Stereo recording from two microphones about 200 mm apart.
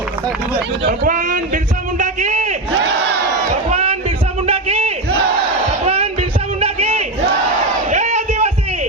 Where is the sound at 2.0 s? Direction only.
35° right (ahead or behind).